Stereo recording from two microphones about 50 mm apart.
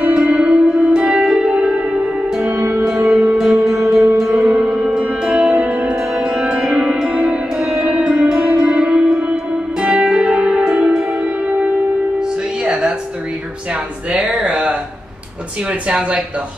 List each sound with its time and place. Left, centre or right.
0.1 s music: right
2.8 s music: centre
4.5 s music: right
5.2 s music: centre
11.4 s music: right
14.1 s a sound: right
14.4 s a sound: right
15.9 s speech: right